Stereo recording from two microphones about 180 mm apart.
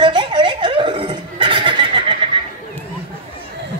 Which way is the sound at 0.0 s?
25° right (ahead or behind).